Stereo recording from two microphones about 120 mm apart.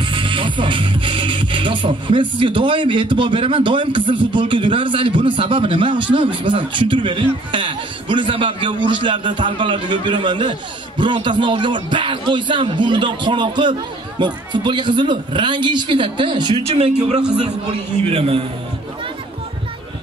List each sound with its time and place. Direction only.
0.0 s speech: 45° right (ahead or behind)
16.6 s a man's voice: 55° right (ahead or behind)